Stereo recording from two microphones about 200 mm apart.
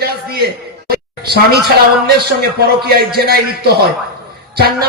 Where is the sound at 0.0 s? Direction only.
50° right (ahead or behind).